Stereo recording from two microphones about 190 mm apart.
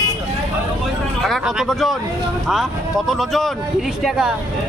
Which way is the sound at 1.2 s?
Centre (ahead or behind).